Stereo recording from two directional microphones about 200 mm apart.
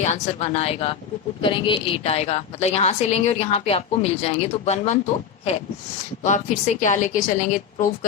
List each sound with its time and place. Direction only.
0.0 s a woman's voice: 35° left (ahead or behind)
6.2 s a woman's voice: 40° left (ahead or behind)